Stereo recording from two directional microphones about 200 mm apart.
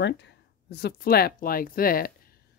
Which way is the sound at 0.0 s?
60° left (ahead or behind).